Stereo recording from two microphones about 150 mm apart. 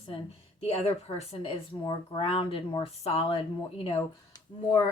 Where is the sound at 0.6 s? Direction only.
40° left (ahead or behind).